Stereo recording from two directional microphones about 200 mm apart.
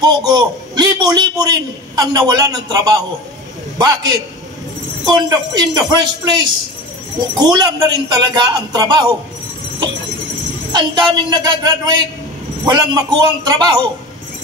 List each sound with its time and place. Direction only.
0.0 s a man's voice: 20° right (ahead or behind)
10.7 s a man's voice: 20° right (ahead or behind)